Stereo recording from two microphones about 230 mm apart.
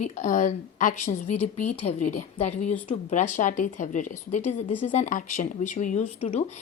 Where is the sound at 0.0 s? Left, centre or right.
Left.